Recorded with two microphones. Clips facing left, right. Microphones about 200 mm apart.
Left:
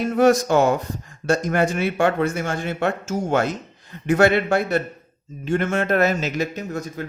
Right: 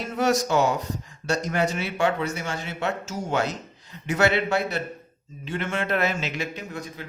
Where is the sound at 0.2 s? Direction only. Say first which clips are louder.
Left 5 dB; 50° left (ahead or behind).